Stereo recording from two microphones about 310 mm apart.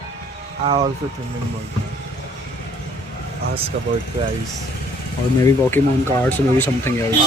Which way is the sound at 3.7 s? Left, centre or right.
Right.